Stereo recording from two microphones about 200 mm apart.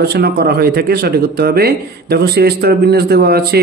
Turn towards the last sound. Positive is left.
turn(degrees=-50)  # may be behind; listen again after turning